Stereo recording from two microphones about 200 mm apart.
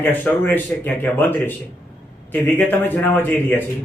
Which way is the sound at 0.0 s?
10° left (ahead or behind).